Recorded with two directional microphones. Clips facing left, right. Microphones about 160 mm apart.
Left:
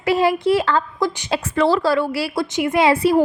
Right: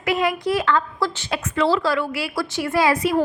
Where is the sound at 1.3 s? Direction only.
30° left (ahead or behind).